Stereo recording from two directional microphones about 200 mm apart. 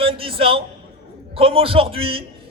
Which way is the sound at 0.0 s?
25° right (ahead or behind).